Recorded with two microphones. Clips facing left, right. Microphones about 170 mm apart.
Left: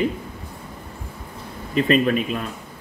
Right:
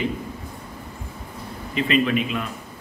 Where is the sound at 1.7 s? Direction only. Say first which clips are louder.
Left 3 dB; 40° left (ahead or behind).